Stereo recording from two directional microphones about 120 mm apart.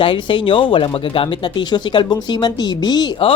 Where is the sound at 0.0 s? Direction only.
45° left (ahead or behind).